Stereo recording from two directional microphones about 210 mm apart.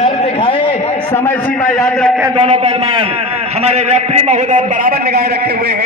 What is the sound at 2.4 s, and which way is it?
A man's voice, 30° right (ahead or behind).